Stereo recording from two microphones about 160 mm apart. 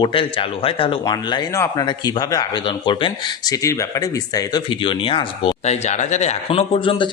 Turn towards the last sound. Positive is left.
turn(degrees=35)  # may be behind; listen again after turning